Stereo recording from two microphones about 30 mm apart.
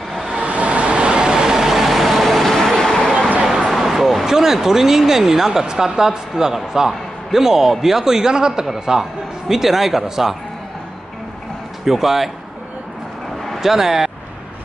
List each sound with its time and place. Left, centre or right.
0.4 s vehicle: right; by 1.7 s centre
1.7 s vehicle: centre
3.7 s vehicle: centre
4.3 s speech: centre
9.5 s speech: centre
11.8 s speech: centre
13.6 s speech: centre